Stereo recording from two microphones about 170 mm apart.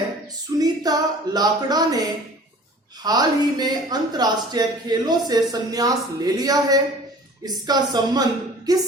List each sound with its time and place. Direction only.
0.6 s speech: 20° right (ahead or behind)